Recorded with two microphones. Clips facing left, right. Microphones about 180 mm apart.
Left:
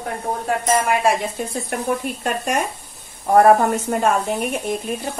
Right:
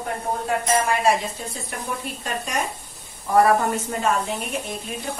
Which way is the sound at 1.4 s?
55° left (ahead or behind).